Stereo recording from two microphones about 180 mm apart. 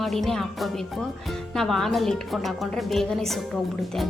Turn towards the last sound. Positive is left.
turn(degrees=0)  # may be behind; listen again after turning